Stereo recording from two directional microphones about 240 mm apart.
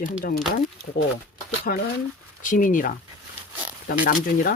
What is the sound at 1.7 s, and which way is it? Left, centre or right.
Speech, left.